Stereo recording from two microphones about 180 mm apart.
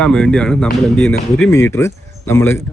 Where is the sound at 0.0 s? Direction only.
5° left (ahead or behind).